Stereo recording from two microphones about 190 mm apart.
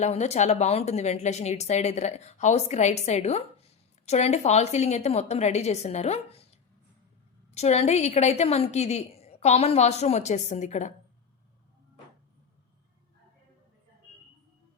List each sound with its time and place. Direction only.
0.0 s a woman's voice: 35° left (ahead or behind)
7.5 s a woman's voice: 35° left (ahead or behind)